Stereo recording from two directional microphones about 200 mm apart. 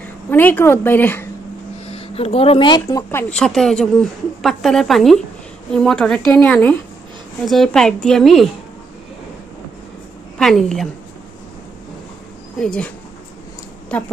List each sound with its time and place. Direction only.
0.0 s a woman's voice: 10° left (ahead or behind)
1.9 s speech: 30° left (ahead or behind); by 8.5 s centre (ahead or behind)
10.3 s a woman's voice: centre (ahead or behind)
12.5 s speech: 5° left (ahead or behind)